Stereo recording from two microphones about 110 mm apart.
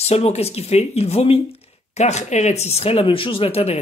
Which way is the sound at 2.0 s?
90° left.